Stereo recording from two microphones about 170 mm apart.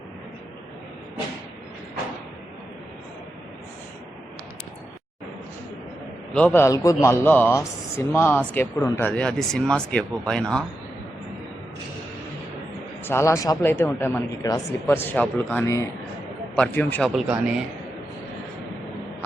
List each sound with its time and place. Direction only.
6.3 s a man's voice: 10° left (ahead or behind)
13.1 s a man's voice: 15° left (ahead or behind)
17.2 s speech: 5° right (ahead or behind)